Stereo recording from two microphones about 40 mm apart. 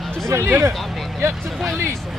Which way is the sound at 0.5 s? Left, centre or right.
Right.